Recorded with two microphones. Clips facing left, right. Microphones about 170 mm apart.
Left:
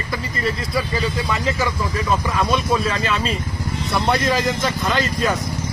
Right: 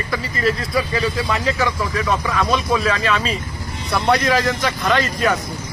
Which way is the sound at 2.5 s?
Centre (ahead or behind).